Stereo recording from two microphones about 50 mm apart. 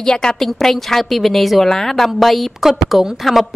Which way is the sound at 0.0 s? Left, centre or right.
Centre.